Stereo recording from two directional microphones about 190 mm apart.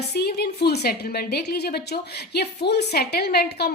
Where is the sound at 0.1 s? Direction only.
55° left (ahead or behind).